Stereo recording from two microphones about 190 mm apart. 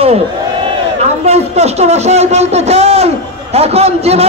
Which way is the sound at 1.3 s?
35° right (ahead or behind).